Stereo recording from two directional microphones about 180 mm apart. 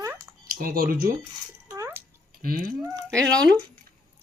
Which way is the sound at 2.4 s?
55° right (ahead or behind).